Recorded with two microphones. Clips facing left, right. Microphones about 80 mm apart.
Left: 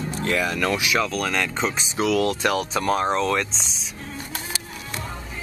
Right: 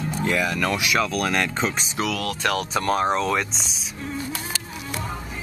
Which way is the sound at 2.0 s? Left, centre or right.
Left.